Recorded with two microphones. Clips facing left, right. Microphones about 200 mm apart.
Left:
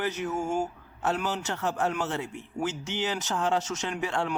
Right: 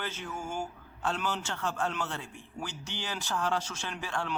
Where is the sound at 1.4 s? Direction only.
20° left (ahead or behind).